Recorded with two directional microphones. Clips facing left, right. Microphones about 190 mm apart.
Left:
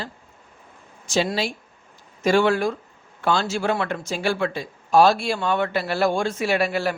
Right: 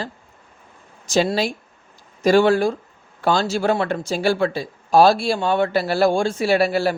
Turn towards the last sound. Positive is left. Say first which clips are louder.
# right 4 dB
turn(degrees=-35)  # may be behind; listen again after turning